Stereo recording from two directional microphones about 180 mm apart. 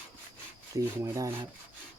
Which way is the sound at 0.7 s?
20° right (ahead or behind).